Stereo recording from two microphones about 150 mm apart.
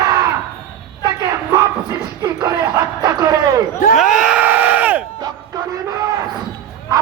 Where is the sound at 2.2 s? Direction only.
25° right (ahead or behind).